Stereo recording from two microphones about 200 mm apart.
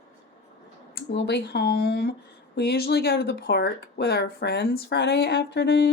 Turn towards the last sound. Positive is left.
turn(degrees=55)  # may be behind; listen again after turning